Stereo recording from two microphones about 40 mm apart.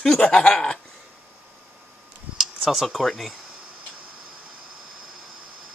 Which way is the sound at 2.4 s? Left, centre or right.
Centre.